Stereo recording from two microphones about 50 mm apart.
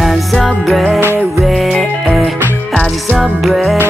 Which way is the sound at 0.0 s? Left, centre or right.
Centre.